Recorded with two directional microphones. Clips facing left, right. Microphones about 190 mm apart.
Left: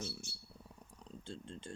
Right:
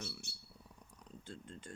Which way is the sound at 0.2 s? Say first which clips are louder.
Left 2 dB; 65° right (ahead or behind).